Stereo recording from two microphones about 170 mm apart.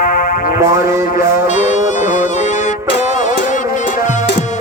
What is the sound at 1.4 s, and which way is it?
Music, 45° left (ahead or behind).